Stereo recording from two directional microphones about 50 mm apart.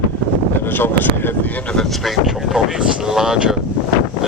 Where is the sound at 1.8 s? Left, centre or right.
Centre.